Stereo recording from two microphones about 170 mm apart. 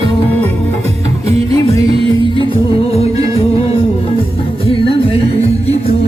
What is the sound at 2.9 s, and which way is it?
Music, 35° left (ahead or behind).